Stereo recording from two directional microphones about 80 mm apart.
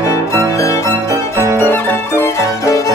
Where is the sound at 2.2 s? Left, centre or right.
Left.